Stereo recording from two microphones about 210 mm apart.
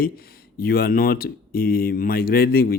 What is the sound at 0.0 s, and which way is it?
Speech, 45° left (ahead or behind).